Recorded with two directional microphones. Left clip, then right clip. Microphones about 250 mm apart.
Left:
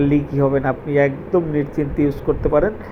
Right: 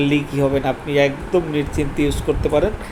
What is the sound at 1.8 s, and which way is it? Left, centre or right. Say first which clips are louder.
Speech: even; left.